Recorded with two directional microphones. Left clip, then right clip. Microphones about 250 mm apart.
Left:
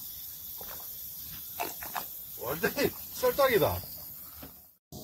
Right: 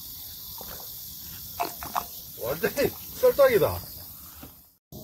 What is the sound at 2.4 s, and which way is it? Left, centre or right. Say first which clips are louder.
Snake: right 4 dB; left.